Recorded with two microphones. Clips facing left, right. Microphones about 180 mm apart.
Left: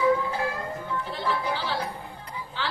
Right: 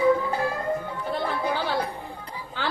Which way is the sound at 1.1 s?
50° right (ahead or behind).